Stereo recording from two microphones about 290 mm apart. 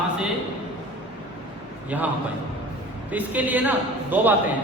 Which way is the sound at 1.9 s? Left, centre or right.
Centre.